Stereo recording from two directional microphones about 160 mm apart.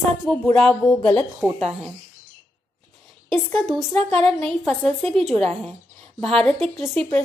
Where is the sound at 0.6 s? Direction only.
5° left (ahead or behind).